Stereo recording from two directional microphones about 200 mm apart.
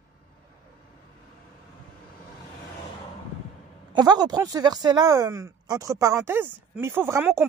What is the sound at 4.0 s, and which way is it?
Speech, 20° right (ahead or behind).